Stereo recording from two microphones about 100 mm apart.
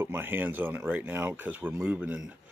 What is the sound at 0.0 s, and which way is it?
Speech, 20° right (ahead or behind).